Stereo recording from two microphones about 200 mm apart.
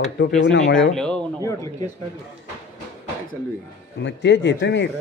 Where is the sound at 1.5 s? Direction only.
15° left (ahead or behind).